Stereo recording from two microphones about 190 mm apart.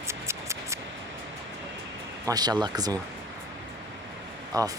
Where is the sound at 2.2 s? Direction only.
20° right (ahead or behind).